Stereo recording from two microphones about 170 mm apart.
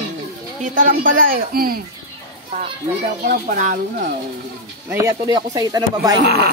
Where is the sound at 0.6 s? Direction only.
50° right (ahead or behind).